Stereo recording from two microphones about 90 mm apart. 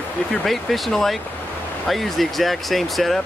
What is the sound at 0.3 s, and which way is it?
Speech, centre (ahead or behind).